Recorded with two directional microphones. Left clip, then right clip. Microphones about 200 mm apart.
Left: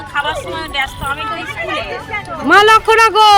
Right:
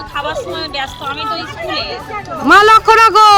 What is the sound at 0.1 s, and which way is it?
Music, 25° right (ahead or behind).